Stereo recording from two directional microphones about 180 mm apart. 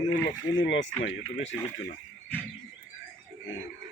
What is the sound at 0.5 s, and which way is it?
Speech, 90° left.